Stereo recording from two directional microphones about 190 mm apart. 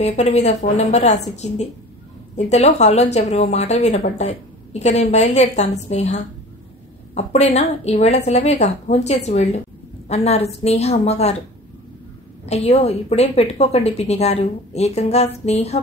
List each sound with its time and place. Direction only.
0.0 s a woman's voice: 35° left (ahead or behind)
12.4 s a woman's voice: 35° left (ahead or behind)